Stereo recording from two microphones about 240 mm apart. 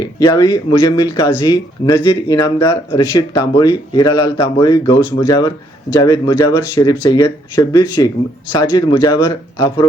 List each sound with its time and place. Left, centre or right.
0.0 s speech: centre